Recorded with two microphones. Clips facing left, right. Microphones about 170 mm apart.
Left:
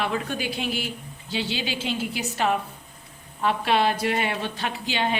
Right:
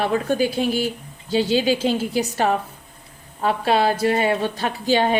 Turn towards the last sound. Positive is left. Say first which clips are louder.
# right 7 dB
turn(degrees=-40)  # may be behind; listen again after turning